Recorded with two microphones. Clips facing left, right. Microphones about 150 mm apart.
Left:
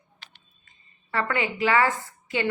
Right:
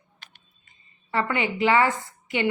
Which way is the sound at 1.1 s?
25° right (ahead or behind).